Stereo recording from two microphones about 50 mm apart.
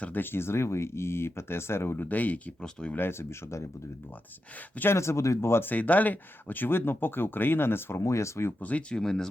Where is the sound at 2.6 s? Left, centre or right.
Centre.